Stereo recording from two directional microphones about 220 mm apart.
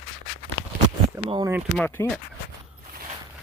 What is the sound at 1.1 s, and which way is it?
Speech, 15° right (ahead or behind).